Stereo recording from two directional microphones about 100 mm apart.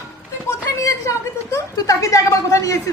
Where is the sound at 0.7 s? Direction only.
30° left (ahead or behind).